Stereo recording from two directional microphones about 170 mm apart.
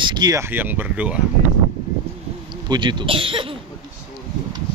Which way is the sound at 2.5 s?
25° right (ahead or behind).